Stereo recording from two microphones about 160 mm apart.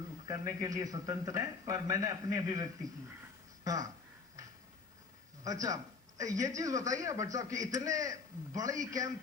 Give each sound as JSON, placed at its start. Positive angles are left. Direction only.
{"t": 0.3, "sound": "a man's voice", "side_deg": -20}
{"t": 5.4, "sound": "a man's voice", "side_deg": -20}